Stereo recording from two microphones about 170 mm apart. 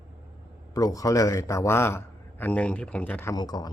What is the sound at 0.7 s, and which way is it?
A man's voice, 20° left (ahead or behind).